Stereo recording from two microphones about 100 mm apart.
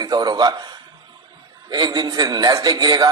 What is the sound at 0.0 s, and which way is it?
Speech, 40° right (ahead or behind).